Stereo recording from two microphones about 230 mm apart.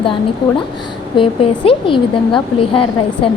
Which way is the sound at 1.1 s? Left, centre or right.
Left.